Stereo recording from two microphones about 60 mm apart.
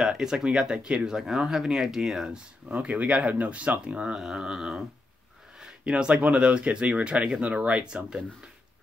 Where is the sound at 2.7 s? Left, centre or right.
Right.